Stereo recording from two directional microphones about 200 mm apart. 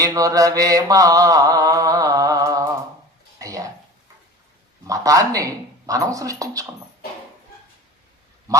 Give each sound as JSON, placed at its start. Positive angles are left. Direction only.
{"t": 0.0, "sound": "mantra", "side_deg": -15}
{"t": 3.3, "sound": "a sound", "side_deg": -15}
{"t": 4.9, "sound": "mantra", "side_deg": -15}